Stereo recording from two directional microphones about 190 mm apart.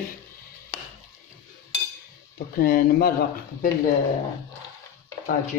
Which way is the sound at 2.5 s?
50° left (ahead or behind).